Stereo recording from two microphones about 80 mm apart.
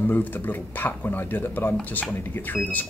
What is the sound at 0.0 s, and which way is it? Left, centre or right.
Speech, left.